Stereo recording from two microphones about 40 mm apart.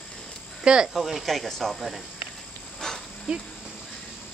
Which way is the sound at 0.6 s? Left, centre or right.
Right.